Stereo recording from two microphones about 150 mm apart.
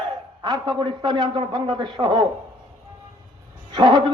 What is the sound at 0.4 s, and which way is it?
A man's voice, 25° right (ahead or behind).